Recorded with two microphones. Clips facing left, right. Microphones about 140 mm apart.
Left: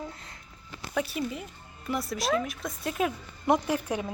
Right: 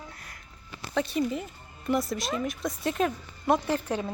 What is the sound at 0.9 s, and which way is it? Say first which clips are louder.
Speech: right 3 dB; 5° left (ahead or behind).